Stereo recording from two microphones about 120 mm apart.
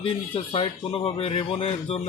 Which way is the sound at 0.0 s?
50° left (ahead or behind).